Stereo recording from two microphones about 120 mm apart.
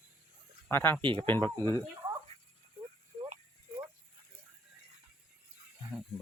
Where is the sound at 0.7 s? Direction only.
20° left (ahead or behind).